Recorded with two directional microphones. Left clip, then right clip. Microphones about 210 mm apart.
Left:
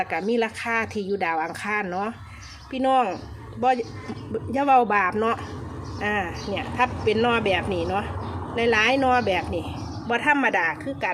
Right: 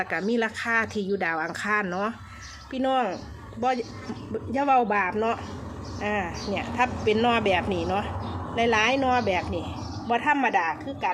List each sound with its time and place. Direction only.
0.0 s speech: centre (ahead or behind); by 11.1 s 15° left (ahead or behind)